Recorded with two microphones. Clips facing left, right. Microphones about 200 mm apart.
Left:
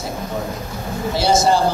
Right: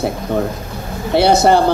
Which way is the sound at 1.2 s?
60° right (ahead or behind).